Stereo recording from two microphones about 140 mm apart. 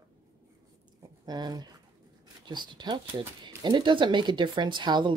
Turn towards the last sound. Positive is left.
turn(degrees=-30)  # may be behind; listen again after turning